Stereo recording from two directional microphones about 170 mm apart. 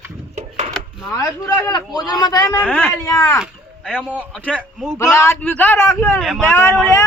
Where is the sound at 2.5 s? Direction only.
10° left (ahead or behind).